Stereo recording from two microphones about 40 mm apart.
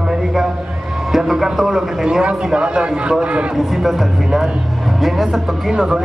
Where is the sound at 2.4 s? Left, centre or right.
Right.